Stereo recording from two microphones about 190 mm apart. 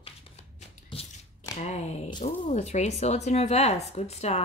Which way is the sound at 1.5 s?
35° left (ahead or behind).